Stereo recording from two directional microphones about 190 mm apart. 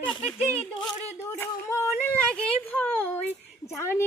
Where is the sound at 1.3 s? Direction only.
15° left (ahead or behind).